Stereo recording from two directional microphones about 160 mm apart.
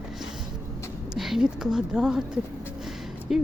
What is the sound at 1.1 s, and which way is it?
A woman's voice, centre (ahead or behind).